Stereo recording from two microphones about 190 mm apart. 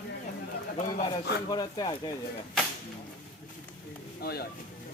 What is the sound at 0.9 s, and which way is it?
Speech, 55° left (ahead or behind).